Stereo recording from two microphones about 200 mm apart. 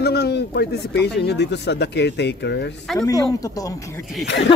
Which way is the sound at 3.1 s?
15° left (ahead or behind).